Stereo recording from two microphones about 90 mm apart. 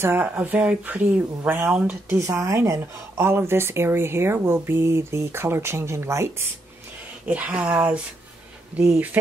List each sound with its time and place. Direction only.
0.0 s speech: 25° right (ahead or behind)
2.0 s a woman's voice: 30° right (ahead or behind)
7.2 s a woman's voice: 15° right (ahead or behind)